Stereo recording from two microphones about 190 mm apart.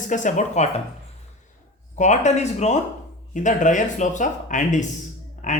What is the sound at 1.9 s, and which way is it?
Speech, 40° left (ahead or behind).